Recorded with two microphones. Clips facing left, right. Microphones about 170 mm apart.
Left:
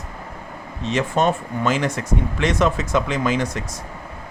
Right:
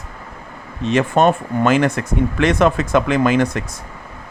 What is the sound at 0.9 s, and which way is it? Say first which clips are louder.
Speech: right 5 dB; 55° right (ahead or behind).